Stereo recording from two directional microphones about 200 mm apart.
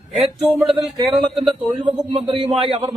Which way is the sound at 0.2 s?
Centre (ahead or behind).